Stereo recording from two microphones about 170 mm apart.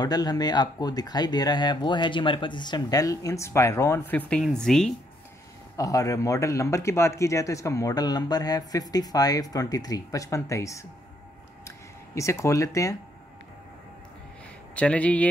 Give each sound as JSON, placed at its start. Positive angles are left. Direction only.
{"t": 0.0, "sound": "a man's voice", "side_deg": 25}
{"t": 5.8, "sound": "a man's voice", "side_deg": 20}
{"t": 12.2, "sound": "speech", "side_deg": 15}
{"t": 14.8, "sound": "speech", "side_deg": 5}